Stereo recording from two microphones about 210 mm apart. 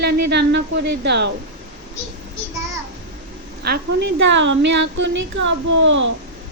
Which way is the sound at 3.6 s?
50° right (ahead or behind).